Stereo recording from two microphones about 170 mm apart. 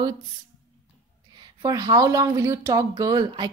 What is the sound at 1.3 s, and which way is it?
A woman's voice, 25° right (ahead or behind).